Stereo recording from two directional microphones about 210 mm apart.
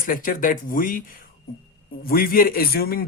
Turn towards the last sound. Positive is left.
turn(degrees=45)  # may be behind; listen again after turning